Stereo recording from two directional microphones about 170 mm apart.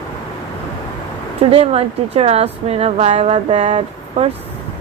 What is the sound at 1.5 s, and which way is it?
A woman's voice, 35° right (ahead or behind).